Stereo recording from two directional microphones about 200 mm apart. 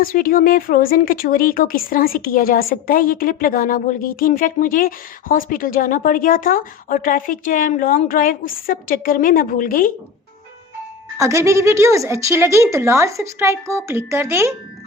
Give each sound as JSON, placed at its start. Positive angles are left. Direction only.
{"t": 0.0, "sound": "speech", "side_deg": 45}
{"t": 11.2, "sound": "a woman's voice", "side_deg": -15}